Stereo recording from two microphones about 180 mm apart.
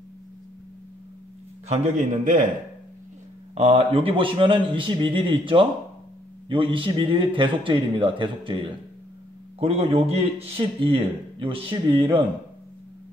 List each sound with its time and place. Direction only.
1.7 s a man's voice: 45° right (ahead or behind)
3.5 s a man's voice: 35° right (ahead or behind)